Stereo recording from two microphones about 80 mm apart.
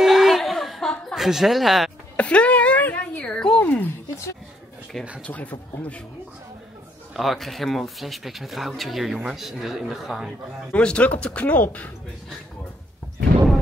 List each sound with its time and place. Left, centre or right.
0.0 s chuckle: centre
2.1 s a sound: centre
3.3 s a sound: centre
3.6 s speech: left
5.2 s speech: centre
7.2 s speech: centre
10.7 s speech: centre